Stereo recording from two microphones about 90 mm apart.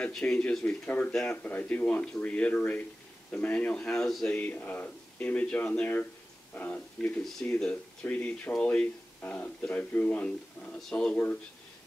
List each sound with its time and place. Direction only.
0.1 s speech: 10° left (ahead or behind)
4.3 s speech: 20° left (ahead or behind)